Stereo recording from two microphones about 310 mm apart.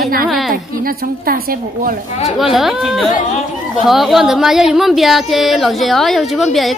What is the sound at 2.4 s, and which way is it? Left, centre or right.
Speech, centre.